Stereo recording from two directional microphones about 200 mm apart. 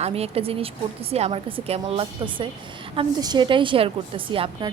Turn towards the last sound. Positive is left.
turn(degrees=-25)  # may be behind; listen again after turning